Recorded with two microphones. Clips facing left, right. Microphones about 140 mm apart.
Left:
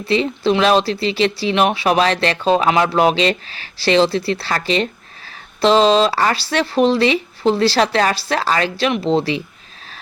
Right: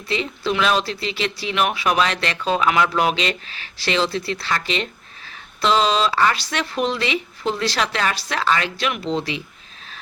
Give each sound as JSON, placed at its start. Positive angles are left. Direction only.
{"t": 0.0, "sound": "speech", "side_deg": 30}